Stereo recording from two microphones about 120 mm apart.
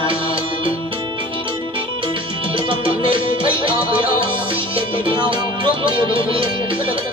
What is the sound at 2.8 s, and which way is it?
Music, 45° right (ahead or behind).